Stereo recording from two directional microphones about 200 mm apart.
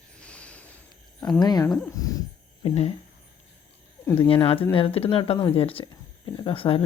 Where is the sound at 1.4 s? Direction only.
20° left (ahead or behind).